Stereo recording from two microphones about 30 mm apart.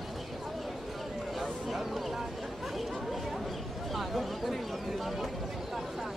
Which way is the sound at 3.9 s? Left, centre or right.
Centre.